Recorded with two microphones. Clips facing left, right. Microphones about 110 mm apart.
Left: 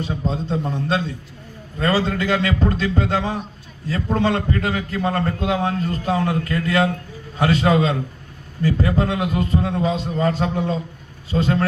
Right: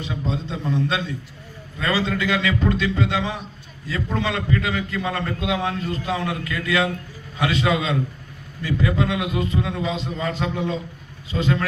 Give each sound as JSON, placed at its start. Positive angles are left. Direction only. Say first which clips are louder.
{"t": 0.0, "sound": "a man's voice", "louder": "left 3 dB", "side_deg": 40}